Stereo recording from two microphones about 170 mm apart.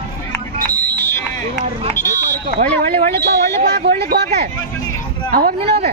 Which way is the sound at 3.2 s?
65° right (ahead or behind).